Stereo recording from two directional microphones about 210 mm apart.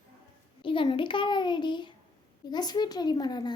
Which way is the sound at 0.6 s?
25° left (ahead or behind).